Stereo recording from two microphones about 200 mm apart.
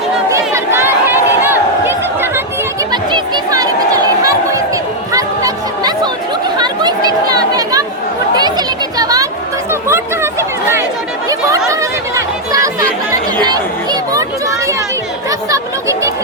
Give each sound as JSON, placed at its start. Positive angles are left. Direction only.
{"t": 0.3, "sound": "chatter", "side_deg": -15}
{"t": 2.9, "sound": "a sound", "side_deg": -20}
{"t": 6.6, "sound": "chatter", "side_deg": -20}